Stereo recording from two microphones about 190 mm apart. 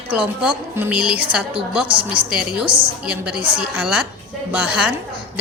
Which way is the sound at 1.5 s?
30° right (ahead or behind).